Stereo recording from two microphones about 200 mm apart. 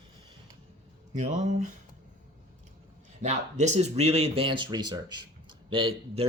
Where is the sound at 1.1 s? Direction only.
35° right (ahead or behind).